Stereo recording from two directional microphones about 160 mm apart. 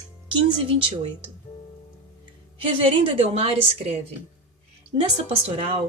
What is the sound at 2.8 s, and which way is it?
A woman's voice, 35° right (ahead or behind).